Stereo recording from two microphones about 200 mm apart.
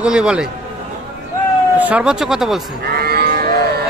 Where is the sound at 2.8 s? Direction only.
50° right (ahead or behind).